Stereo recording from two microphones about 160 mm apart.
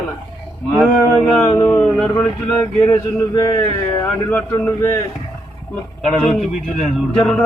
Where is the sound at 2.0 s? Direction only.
5° left (ahead or behind).